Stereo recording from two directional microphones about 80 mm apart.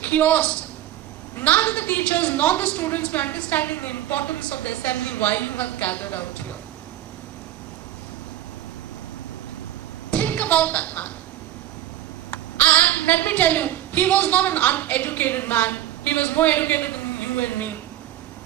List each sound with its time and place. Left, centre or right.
0.0 s a woman's voice: centre
10.1 s a sound: centre
12.3 s a woman's voice: centre